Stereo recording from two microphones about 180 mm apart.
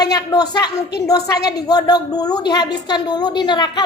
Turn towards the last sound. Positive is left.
turn(degrees=25)  # may be behind; listen again after turning